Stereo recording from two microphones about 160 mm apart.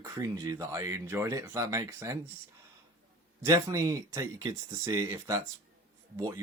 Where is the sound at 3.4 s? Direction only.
20° right (ahead or behind).